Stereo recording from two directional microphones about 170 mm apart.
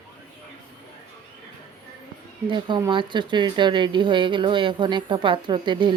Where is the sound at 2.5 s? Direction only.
25° right (ahead or behind).